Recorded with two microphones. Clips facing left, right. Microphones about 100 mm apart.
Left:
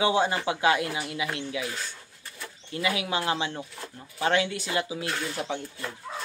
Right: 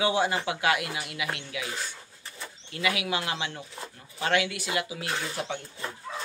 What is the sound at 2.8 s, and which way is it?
Speech, 30° left (ahead or behind).